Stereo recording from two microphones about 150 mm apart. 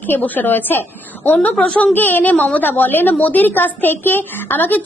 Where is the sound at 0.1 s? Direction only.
10° left (ahead or behind).